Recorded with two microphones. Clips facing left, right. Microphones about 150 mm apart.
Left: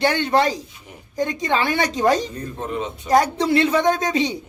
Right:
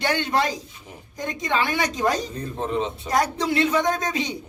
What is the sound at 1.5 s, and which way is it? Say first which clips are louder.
Speech: even; 30° left (ahead or behind).